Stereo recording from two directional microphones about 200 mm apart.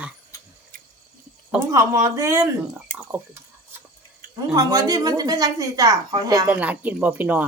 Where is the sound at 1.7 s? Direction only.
15° right (ahead or behind).